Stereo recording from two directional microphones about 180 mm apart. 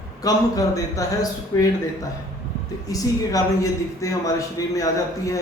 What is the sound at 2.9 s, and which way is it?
A man's voice, 20° left (ahead or behind).